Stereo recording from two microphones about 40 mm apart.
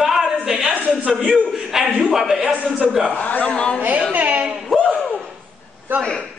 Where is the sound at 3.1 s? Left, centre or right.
Left.